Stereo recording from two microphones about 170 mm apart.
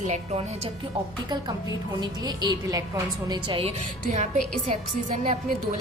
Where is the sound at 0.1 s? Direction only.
40° right (ahead or behind).